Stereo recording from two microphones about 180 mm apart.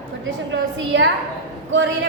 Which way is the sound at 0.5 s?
85° right.